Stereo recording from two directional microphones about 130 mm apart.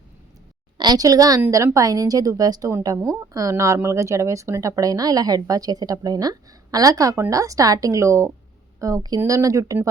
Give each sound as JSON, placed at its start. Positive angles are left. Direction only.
{"t": 0.8, "sound": "a woman's voice", "side_deg": -30}